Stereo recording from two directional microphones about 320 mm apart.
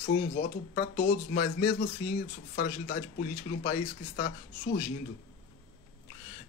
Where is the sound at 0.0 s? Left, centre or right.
Left.